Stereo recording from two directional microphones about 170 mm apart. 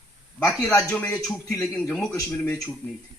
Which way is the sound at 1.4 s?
20° left (ahead or behind).